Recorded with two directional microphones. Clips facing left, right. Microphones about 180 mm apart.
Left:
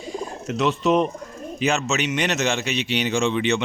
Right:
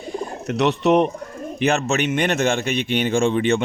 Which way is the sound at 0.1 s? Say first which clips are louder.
Right 3 dB; 60° right (ahead or behind).